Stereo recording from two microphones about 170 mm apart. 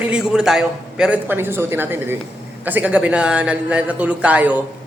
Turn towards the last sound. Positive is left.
turn(degrees=-10)  # may be behind; listen again after turning